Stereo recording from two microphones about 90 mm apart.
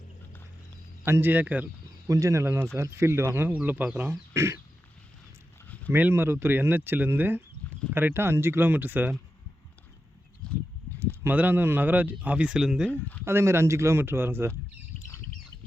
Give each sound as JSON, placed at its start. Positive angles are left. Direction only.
{"t": 1.0, "sound": "speech", "side_deg": -25}
{"t": 2.0, "sound": "speech", "side_deg": -35}
{"t": 5.6, "sound": "a sound", "side_deg": 15}
{"t": 5.9, "sound": "speech", "side_deg": -25}
{"t": 10.4, "sound": "a sound", "side_deg": 10}
{"t": 11.0, "sound": "speech", "side_deg": -25}
{"t": 12.9, "sound": "speech", "side_deg": 15}
{"t": 13.2, "sound": "speech", "side_deg": -30}